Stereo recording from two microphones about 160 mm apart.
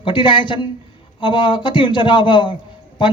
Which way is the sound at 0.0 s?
30° left (ahead or behind).